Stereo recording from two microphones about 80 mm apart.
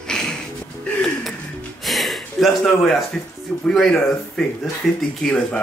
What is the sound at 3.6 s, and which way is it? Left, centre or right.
Speech, centre.